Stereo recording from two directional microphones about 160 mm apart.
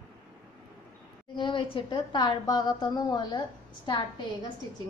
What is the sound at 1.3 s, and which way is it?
A woman's voice, 30° left (ahead or behind).